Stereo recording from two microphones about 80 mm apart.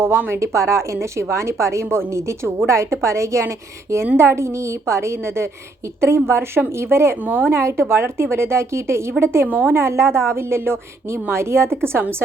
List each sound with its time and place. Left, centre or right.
0.0 s a woman's voice: right